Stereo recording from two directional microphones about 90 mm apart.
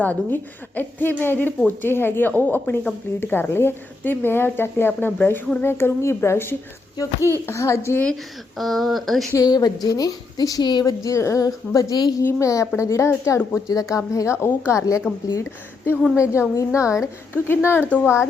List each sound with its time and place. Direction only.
0.0 s speech: 20° left (ahead or behind)
7.2 s speech: 30° right (ahead or behind)
7.4 s speech: 35° left (ahead or behind)
8.5 s speech: centre (ahead or behind)
9.3 s a woman's voice: 45° left (ahead or behind)
10.8 s a woman's voice: 40° left (ahead or behind)
16.1 s a woman's voice: 35° left (ahead or behind)
17.3 s speech: 25° left (ahead or behind)